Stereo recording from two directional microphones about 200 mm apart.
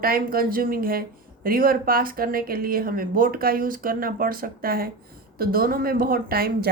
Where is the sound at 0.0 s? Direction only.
45° right (ahead or behind).